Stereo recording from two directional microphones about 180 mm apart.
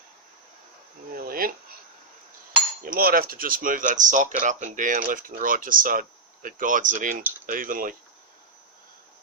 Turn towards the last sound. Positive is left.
turn(degrees=-50)  # may be behind; listen again after turning